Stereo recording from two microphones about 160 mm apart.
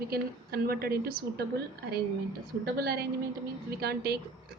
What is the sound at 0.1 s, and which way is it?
A woman's voice, 70° right (ahead or behind).